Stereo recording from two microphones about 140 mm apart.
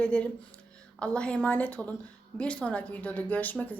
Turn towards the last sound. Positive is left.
turn(degrees=10)  # may be behind; listen again after turning